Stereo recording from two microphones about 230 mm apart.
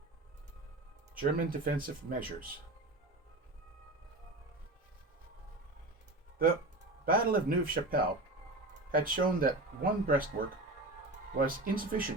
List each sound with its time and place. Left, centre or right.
1.1 s speech: right
7.0 s speech: right
11.3 s speech: right